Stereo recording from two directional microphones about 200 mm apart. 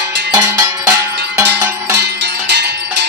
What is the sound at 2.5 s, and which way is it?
Music, 60° right (ahead or behind).